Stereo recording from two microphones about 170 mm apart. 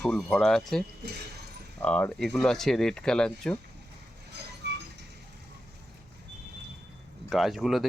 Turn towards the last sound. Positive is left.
turn(degrees=0)  # may be behind; listen again after turning